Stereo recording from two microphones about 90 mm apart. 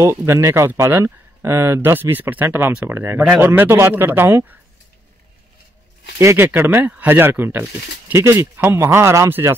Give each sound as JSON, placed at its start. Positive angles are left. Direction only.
{"t": 0.0, "sound": "speech", "side_deg": -30}
{"t": 6.1, "sound": "speech", "side_deg": -30}